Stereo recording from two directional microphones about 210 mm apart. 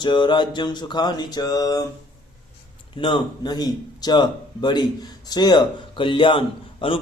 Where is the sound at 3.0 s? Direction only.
25° left (ahead or behind).